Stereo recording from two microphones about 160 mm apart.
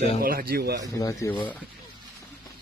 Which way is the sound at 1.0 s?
20° left (ahead or behind).